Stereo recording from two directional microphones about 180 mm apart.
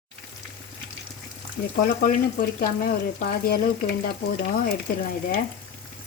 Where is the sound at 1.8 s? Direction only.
50° left (ahead or behind).